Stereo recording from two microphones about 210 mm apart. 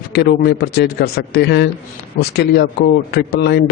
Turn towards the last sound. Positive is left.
turn(degrees=50)  # may be behind; listen again after turning